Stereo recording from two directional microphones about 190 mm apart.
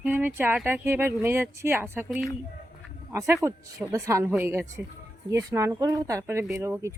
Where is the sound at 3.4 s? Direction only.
15° right (ahead or behind).